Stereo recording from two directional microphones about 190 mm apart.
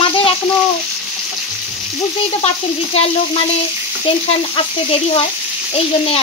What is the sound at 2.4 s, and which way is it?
Frying, 30° left (ahead or behind).